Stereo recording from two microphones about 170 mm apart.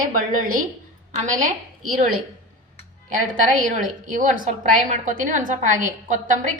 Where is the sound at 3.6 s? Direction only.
50° right (ahead or behind).